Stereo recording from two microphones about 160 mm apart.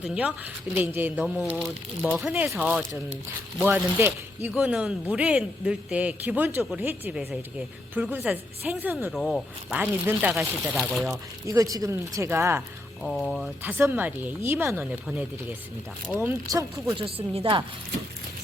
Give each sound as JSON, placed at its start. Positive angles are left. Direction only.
{"t": 0.0, "sound": "speech", "side_deg": -5}
{"t": 2.3, "sound": "a man's voice", "side_deg": -10}
{"t": 9.1, "sound": "a man's voice", "side_deg": 0}
{"t": 11.1, "sound": "speech", "side_deg": -20}
{"t": 13.0, "sound": "speech", "side_deg": 0}
{"t": 13.6, "sound": "a man's voice", "side_deg": -15}
{"t": 16.5, "sound": "speech", "side_deg": -20}
{"t": 17.0, "sound": "speech", "side_deg": -35}